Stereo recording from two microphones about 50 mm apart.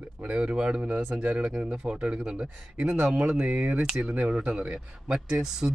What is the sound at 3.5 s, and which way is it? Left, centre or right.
Speech, right.